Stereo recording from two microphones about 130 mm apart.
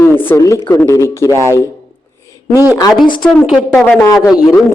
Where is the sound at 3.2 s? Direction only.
Centre (ahead or behind).